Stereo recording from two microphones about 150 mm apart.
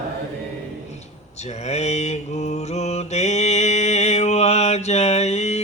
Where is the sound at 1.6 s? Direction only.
45° left (ahead or behind).